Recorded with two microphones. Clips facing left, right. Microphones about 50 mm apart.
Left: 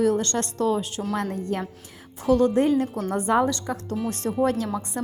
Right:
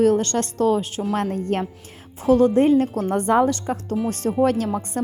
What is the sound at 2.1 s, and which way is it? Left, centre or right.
Speech, right.